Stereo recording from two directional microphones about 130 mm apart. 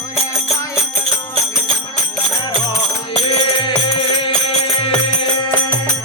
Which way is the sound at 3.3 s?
45° left (ahead or behind).